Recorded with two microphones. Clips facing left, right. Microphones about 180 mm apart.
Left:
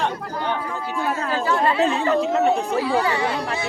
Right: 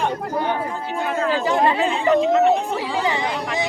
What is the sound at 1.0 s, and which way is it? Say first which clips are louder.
Speech: right 4 dB; 40° left (ahead or behind).